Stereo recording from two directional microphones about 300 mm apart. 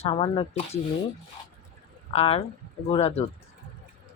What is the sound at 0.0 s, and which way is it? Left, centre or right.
Speech, centre.